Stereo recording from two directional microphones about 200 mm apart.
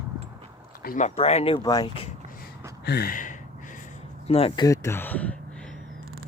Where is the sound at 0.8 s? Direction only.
40° left (ahead or behind); by 1.9 s 20° left (ahead or behind).